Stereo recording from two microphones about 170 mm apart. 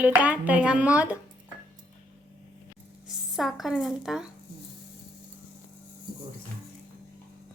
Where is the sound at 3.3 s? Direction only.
Centre (ahead or behind).